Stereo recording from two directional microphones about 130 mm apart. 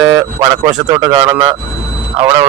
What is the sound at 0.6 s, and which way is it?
Speech, 30° right (ahead or behind).